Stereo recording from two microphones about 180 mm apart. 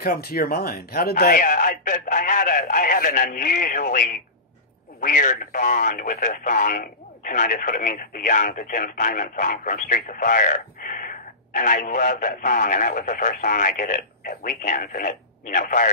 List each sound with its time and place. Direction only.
0.0 s speech: 55° left (ahead or behind)